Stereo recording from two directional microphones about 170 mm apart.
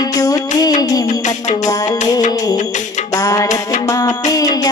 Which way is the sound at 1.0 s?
45° left (ahead or behind).